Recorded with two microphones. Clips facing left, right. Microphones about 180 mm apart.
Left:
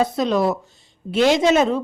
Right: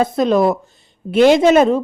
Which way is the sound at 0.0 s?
50° right (ahead or behind).